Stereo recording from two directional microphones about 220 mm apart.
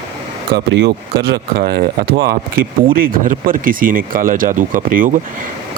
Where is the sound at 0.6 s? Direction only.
50° right (ahead or behind).